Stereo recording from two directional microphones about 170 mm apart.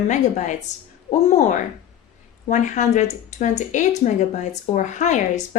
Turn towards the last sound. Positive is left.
turn(degrees=45)  # may be behind; listen again after turning